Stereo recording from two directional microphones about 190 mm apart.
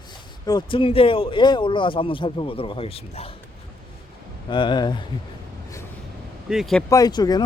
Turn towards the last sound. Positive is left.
turn(degrees=20)  # may be behind; listen again after turning